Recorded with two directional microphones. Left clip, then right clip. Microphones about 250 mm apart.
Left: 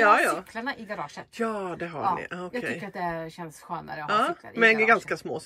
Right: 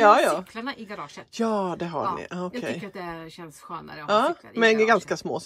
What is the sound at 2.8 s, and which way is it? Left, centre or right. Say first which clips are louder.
A woman's voice: left 4 dB; centre.